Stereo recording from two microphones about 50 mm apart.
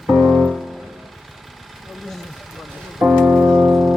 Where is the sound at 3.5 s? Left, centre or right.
Centre.